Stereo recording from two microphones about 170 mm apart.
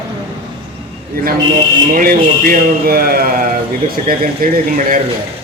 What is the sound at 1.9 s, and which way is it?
Speech, 60° right (ahead or behind).